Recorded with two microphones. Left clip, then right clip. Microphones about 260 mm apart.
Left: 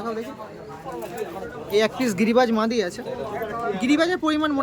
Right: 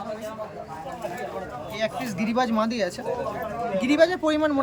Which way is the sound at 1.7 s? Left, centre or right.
Centre.